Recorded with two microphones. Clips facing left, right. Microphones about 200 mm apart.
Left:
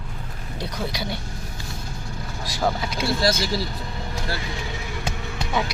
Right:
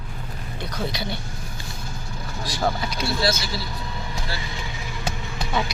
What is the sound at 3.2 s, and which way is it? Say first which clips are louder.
Speech: left 2 dB; 35° left (ahead or behind).